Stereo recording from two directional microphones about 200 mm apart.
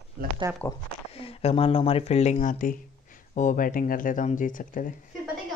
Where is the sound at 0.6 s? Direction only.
15° left (ahead or behind).